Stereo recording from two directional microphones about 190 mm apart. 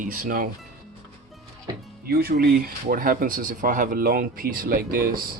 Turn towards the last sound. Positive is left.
turn(degrees=-50)  # may be behind; listen again after turning